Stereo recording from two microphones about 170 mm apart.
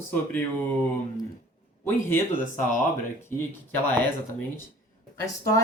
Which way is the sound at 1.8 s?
15° left (ahead or behind).